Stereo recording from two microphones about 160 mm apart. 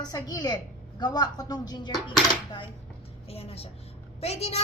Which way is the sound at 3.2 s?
40° left (ahead or behind).